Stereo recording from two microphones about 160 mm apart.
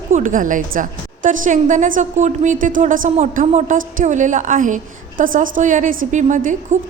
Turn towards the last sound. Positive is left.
turn(degrees=-50)  # may be behind; listen again after turning